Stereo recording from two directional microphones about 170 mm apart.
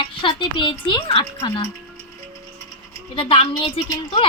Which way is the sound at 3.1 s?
30° left (ahead or behind).